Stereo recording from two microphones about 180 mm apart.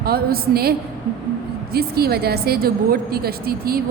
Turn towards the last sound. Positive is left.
turn(degrees=-55)  # may be behind; listen again after turning